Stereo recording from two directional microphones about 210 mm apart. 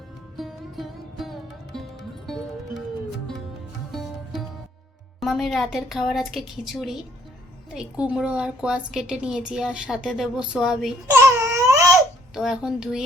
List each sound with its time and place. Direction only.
0.3 s music: centre (ahead or behind)
5.2 s a woman's voice: centre (ahead or behind)
11.2 s baby cry: 15° right (ahead or behind)
12.3 s a woman's voice: centre (ahead or behind)